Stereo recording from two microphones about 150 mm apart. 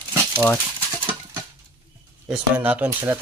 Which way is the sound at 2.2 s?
10° right (ahead or behind).